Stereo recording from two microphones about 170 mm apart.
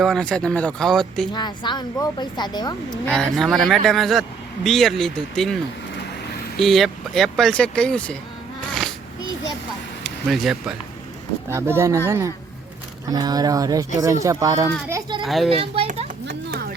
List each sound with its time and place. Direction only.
0.0 s speech: 5° left (ahead or behind)
1.3 s a woman's voice: 25° left (ahead or behind)
3.1 s speech: 5° left (ahead or behind)
6.6 s speech: centre (ahead or behind)
10.0 s speech: centre (ahead or behind)
11.4 s speech: 15° right (ahead or behind)
15.2 s speech: centre (ahead or behind)
15.4 s a child's voice: 35° right (ahead or behind)
16.2 s a sound: 70° right (ahead or behind)